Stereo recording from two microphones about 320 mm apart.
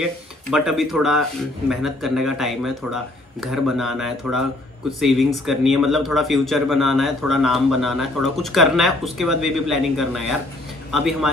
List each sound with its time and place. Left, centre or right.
0.5 s speech: centre